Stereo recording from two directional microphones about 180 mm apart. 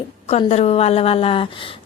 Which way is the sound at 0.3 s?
35° left (ahead or behind).